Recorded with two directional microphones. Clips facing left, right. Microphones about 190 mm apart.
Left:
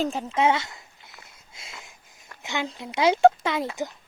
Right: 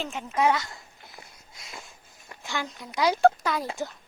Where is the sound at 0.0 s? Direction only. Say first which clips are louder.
Left 7 dB; 35° left (ahead or behind).